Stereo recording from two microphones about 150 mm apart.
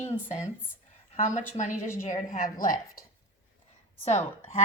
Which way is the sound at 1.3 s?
55° left (ahead or behind).